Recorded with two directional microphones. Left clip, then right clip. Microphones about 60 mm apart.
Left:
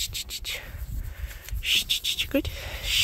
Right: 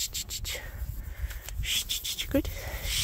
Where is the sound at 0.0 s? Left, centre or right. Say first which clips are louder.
Left 3 dB; right.